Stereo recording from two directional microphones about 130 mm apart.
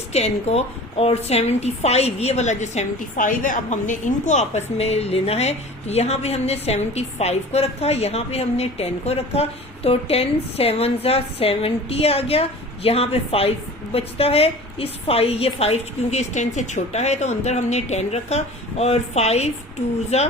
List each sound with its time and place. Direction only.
0.1 s a woman's voice: 55° left (ahead or behind)